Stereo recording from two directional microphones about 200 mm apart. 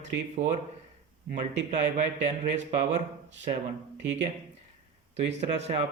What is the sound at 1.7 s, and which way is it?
Speech, 35° right (ahead or behind).